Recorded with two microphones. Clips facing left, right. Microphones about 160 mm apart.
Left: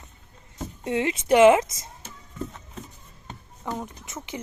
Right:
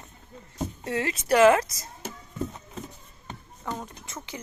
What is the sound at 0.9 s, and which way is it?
Speech, 20° left (ahead or behind).